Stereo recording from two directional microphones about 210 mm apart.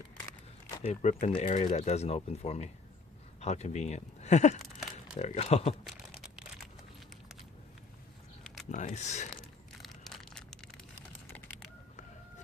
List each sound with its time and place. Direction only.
0.8 s speech: 30° left (ahead or behind)
8.7 s speech: 35° left (ahead or behind)
9.8 s crushing: centre (ahead or behind)
11.3 s typing: 10° left (ahead or behind)